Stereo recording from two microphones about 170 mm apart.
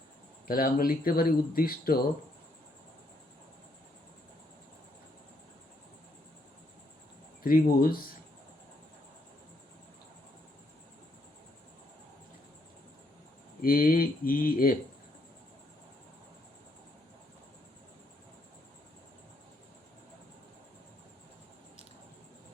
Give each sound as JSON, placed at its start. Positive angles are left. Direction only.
{"t": 0.4, "sound": "speech", "side_deg": 60}
{"t": 7.4, "sound": "speech", "side_deg": 60}
{"t": 13.6, "sound": "speech", "side_deg": 55}